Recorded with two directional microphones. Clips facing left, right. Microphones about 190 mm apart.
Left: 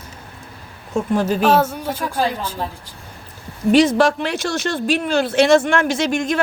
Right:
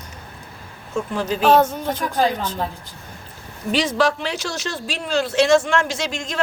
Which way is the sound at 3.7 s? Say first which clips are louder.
Left 6 dB; 50° left (ahead or behind).